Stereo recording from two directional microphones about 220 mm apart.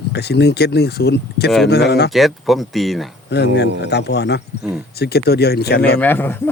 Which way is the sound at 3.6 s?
50° left (ahead or behind).